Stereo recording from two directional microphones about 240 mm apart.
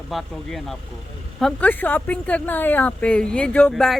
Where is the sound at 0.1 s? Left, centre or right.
Centre.